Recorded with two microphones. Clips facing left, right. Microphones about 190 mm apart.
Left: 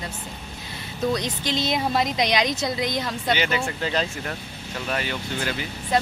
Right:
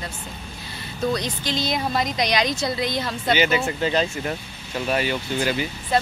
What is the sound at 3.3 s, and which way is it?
Speech, 5° right (ahead or behind).